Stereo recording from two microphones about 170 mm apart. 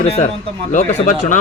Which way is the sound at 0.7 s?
45° left (ahead or behind).